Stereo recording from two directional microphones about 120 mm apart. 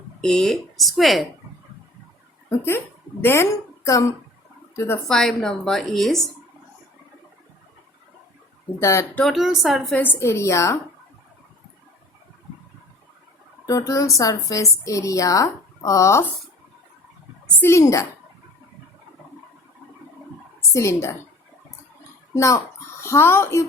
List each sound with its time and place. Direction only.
0.2 s a woman's voice: 5° left (ahead or behind)
2.5 s speech: 20° left (ahead or behind)
5.0 s a woman's voice: 5° left (ahead or behind)
8.8 s a woman's voice: 20° left (ahead or behind)
9.1 s a woman's voice: centre (ahead or behind)
9.9 s a woman's voice: 15° left (ahead or behind)
13.7 s a woman's voice: 30° left (ahead or behind)
17.6 s a woman's voice: 25° left (ahead or behind)
20.6 s a woman's voice: 25° left (ahead or behind)
22.4 s a woman's voice: 25° left (ahead or behind)